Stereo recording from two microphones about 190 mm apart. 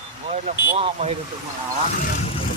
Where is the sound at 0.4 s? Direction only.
35° right (ahead or behind).